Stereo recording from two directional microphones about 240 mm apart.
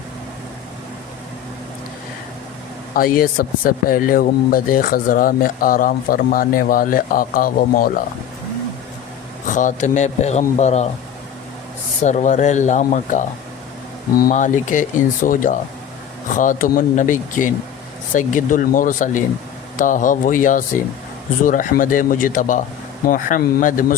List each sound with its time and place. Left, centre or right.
2.9 s speech: left
9.5 s a man's voice: left
12.0 s speech: left